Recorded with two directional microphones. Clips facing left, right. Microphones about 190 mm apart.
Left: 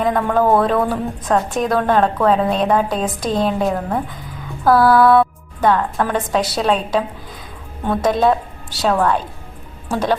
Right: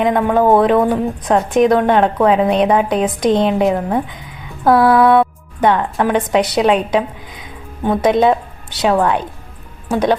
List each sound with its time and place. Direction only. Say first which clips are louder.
0.0 s a woman's voice: right 3 dB; 15° right (ahead or behind)